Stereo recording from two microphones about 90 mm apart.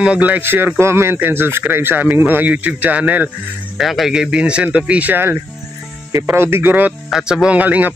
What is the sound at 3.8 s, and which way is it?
A man's voice, centre (ahead or behind).